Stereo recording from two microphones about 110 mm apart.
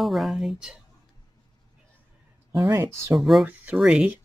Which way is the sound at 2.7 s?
25° right (ahead or behind).